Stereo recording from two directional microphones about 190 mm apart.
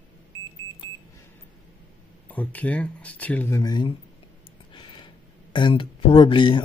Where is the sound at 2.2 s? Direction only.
10° left (ahead or behind).